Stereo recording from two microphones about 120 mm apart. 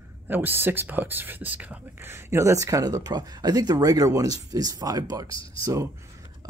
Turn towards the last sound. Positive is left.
turn(degrees=-30)  # may be behind; listen again after turning